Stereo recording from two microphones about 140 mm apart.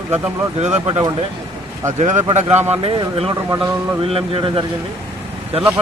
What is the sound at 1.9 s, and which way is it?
Speech, 60° right (ahead or behind).